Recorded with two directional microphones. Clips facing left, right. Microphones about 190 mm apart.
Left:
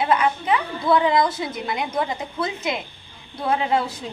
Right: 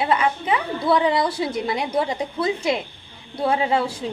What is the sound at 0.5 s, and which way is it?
A woman's voice, 35° right (ahead or behind).